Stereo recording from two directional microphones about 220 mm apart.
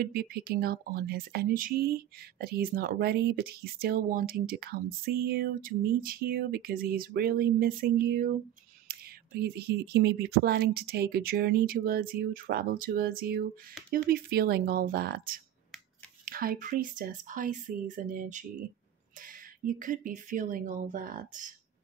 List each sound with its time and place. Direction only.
0.0 s speech: 45° right (ahead or behind)